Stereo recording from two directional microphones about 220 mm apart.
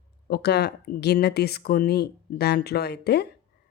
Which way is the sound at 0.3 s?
45° left (ahead or behind).